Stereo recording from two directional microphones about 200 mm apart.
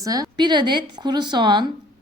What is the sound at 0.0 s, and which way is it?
A woman's voice, 20° right (ahead or behind).